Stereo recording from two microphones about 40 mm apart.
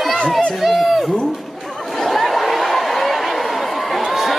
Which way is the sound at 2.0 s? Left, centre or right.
Centre.